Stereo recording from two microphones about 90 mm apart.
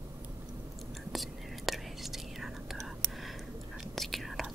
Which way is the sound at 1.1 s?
Centre (ahead or behind).